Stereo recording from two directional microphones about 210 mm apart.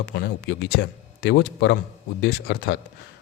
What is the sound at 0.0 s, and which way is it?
Speech, 55° left (ahead or behind).